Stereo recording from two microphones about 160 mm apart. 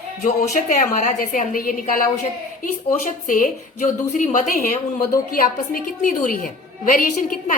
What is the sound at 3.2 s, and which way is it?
A woman's voice, 55° left (ahead or behind).